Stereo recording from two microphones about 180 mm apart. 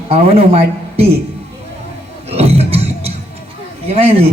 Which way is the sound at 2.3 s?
35° right (ahead or behind).